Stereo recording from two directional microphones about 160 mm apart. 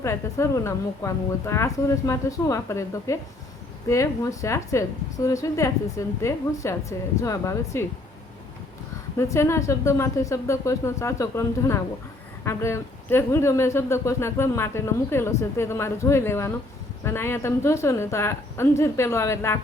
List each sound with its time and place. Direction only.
0.0 s a woman's voice: 20° left (ahead or behind)
9.1 s speech: 15° left (ahead or behind)